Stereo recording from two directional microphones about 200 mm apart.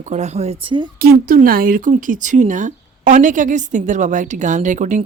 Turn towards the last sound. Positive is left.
turn(degrees=-40)  # may be behind; listen again after turning